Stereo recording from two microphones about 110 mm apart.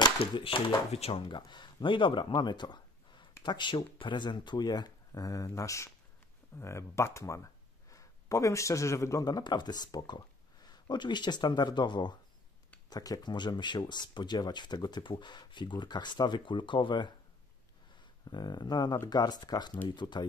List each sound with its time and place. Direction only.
0.2 s speech: 55° left (ahead or behind)
0.9 s speech: 65° left (ahead or behind)
1.3 s speech: 45° left (ahead or behind)
18.2 s speech: 40° left (ahead or behind)